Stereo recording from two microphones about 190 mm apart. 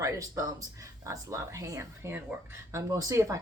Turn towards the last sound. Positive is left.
turn(degrees=-15)  # may be behind; listen again after turning